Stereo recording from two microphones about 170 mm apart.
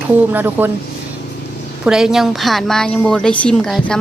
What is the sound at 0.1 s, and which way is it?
Speech, 10° right (ahead or behind).